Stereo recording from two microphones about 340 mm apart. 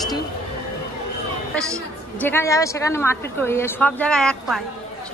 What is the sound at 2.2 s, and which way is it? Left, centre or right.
A woman's voice, centre.